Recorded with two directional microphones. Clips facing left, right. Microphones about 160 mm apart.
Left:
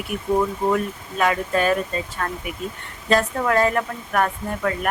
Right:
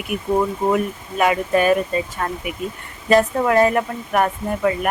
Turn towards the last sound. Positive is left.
turn(degrees=-15)  # may be behind; listen again after turning